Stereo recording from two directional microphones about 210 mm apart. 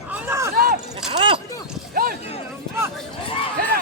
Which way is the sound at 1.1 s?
25° right (ahead or behind).